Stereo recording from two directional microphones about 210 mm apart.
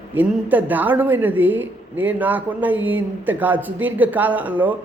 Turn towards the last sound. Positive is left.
turn(degrees=-10)  # may be behind; listen again after turning